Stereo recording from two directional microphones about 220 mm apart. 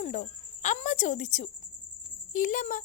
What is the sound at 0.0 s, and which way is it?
Speech, 35° left (ahead or behind).